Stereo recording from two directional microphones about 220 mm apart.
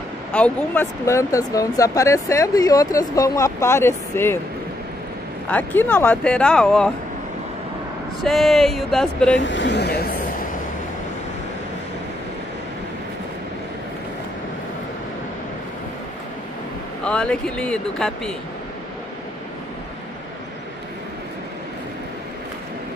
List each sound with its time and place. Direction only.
0.3 s speech: 5° left (ahead or behind)
5.5 s speech: 5° left (ahead or behind)
8.2 s speech: centre (ahead or behind)
9.4 s speech: 55° left (ahead or behind)
17.0 s speech: 5° left (ahead or behind)